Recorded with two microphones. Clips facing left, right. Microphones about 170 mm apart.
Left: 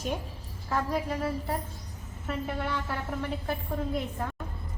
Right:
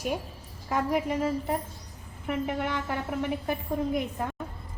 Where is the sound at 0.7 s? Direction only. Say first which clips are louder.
Right 3 dB; 15° right (ahead or behind).